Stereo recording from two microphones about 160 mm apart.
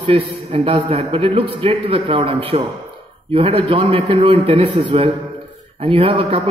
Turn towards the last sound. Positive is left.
turn(degrees=-35)  # may be behind; listen again after turning